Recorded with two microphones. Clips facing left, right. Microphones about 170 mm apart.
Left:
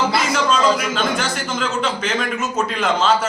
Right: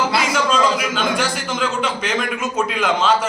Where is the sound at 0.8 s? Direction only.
Centre (ahead or behind).